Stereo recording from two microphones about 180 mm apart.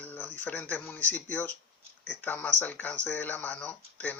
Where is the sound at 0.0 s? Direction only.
10° left (ahead or behind).